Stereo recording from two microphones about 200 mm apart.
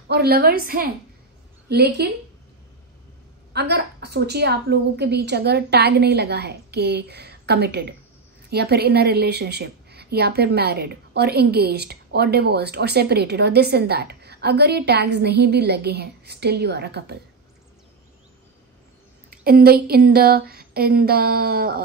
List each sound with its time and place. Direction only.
0.1 s a woman's voice: 50° right (ahead or behind)
3.5 s a woman's voice: 55° right (ahead or behind)
19.3 s a woman's voice: 50° right (ahead or behind)